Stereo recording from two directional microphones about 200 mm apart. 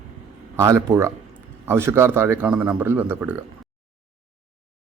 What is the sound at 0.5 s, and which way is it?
Speech, 15° right (ahead or behind).